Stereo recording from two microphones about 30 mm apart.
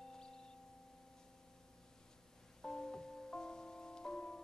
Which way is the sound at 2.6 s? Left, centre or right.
Left.